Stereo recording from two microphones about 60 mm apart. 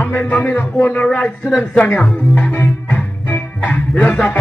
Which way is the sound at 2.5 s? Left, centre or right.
Left.